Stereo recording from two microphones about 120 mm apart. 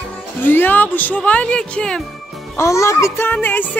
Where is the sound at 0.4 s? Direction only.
15° left (ahead or behind).